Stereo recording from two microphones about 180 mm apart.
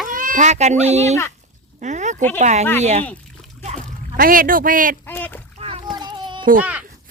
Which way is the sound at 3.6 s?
45° right (ahead or behind).